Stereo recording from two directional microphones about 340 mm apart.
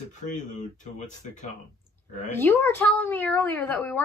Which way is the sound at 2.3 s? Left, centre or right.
Centre.